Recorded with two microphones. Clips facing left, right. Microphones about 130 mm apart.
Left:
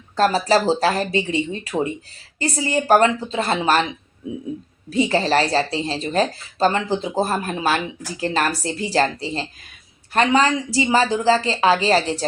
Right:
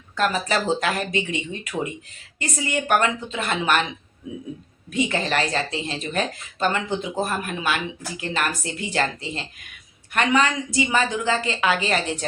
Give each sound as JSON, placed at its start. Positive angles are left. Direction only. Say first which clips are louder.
{"t": 0.2, "sound": "speech", "louder": "left 6 dB", "side_deg": 35}
{"t": 4.9, "sound": "speech", "louder": "left 5 dB", "side_deg": 35}